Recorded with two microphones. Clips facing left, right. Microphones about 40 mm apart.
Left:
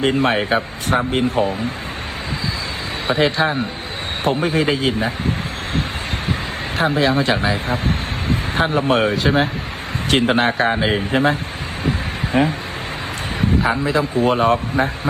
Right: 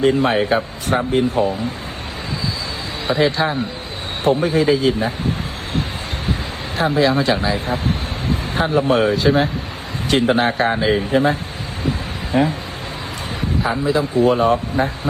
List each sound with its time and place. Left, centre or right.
0.0 s speech: left
3.1 s speech: left
6.7 s speech: left
10.3 s speech: left
11.1 s speech: left